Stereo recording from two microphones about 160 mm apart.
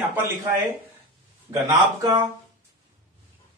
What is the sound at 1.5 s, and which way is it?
Speech, 20° right (ahead or behind).